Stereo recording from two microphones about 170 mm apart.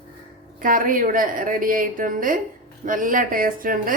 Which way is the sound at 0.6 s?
55° right (ahead or behind).